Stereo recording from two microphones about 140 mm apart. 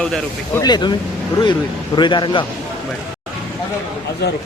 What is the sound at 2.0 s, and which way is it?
Speech, 35° left (ahead or behind).